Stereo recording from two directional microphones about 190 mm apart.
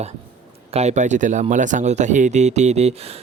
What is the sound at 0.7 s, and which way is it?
Speech, 35° right (ahead or behind).